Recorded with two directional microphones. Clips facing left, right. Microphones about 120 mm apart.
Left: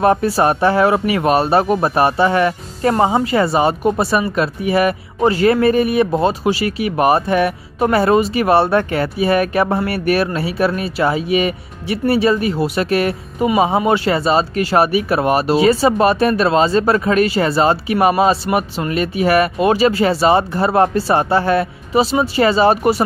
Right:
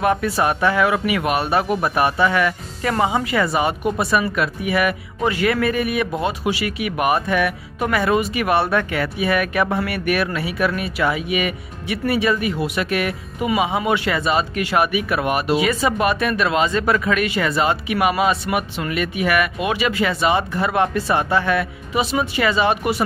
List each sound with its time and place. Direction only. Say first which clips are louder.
0.0 s speech: left 5 dB; 35° left (ahead or behind)